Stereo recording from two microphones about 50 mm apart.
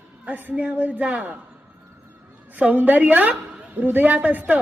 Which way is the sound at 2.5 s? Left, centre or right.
Right.